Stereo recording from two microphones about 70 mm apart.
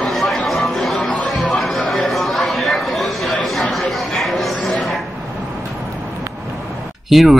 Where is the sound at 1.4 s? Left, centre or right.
Centre.